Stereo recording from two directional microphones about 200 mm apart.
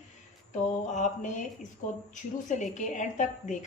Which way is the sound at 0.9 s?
40° left (ahead or behind).